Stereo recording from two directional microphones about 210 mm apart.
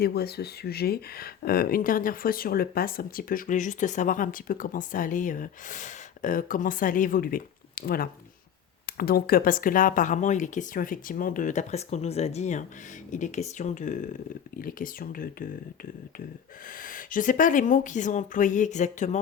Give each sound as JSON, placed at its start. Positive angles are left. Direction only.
{"t": 0.0, "sound": "speech", "side_deg": 50}
{"t": 16.8, "sound": "speech", "side_deg": 40}